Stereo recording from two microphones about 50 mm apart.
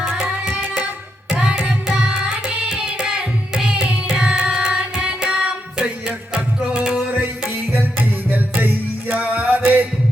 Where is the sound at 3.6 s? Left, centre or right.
Centre.